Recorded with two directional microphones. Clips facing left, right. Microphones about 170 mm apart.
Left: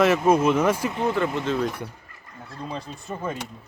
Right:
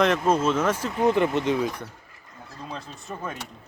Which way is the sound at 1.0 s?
20° right (ahead or behind).